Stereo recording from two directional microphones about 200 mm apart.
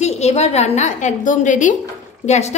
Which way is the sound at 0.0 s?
35° left (ahead or behind).